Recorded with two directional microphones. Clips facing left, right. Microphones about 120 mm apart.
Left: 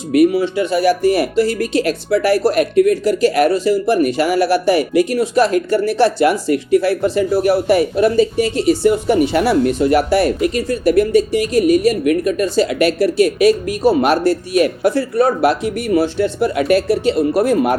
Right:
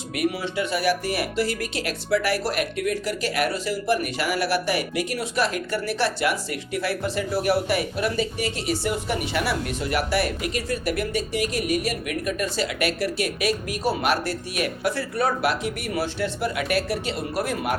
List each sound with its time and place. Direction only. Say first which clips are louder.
0.1 s speech: left 13 dB; 35° left (ahead or behind)